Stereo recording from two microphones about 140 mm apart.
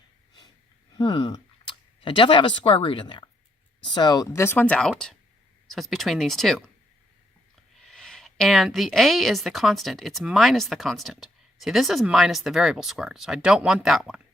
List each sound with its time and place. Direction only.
0.9 s speech: 35° left (ahead or behind)
4.4 s a woman's voice: 15° left (ahead or behind)
7.9 s a woman's voice: 5° left (ahead or behind)